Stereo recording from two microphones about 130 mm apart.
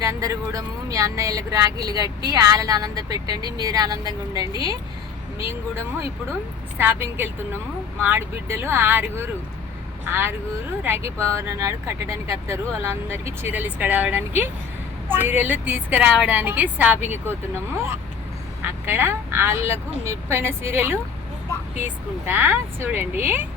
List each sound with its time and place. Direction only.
0.0 s speech: 25° right (ahead or behind)
6.7 s speech: 15° right (ahead or behind)
18.6 s speech: 20° right (ahead or behind)
22.3 s speech: 15° right (ahead or behind)